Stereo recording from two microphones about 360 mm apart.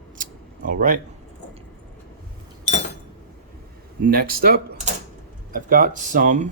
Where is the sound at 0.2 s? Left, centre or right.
Right.